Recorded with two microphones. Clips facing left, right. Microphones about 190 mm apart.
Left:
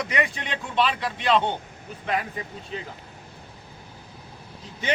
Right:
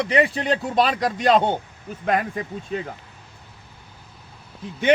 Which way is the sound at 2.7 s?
45° right (ahead or behind).